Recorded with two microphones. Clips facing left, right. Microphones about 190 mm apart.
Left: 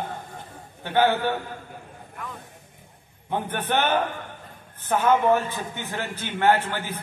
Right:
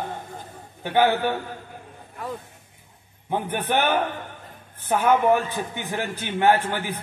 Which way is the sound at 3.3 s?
10° right (ahead or behind).